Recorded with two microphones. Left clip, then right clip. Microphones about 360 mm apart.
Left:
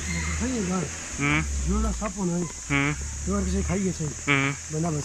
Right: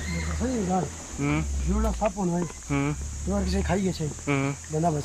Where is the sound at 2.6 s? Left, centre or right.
Centre.